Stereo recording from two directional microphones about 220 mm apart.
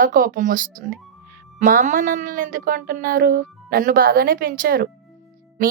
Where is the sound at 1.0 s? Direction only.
Centre (ahead or behind).